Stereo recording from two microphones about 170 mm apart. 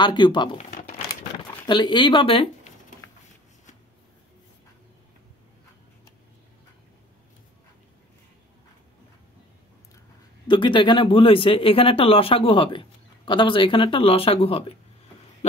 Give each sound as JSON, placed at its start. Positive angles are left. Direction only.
{"t": 0.0, "sound": "speech", "side_deg": 25}
{"t": 0.6, "sound": "a sound", "side_deg": 50}
{"t": 1.7, "sound": "speech", "side_deg": 25}
{"t": 10.5, "sound": "speech", "side_deg": 30}